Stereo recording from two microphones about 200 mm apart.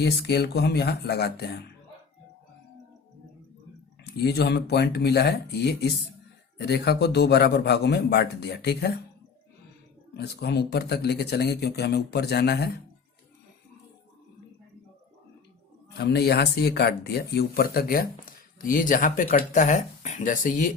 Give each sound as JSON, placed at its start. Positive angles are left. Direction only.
{"t": 0.0, "sound": "speech", "side_deg": 55}
{"t": 4.0, "sound": "speech", "side_deg": 55}
{"t": 10.2, "sound": "speech", "side_deg": 55}
{"t": 16.0, "sound": "speech", "side_deg": 55}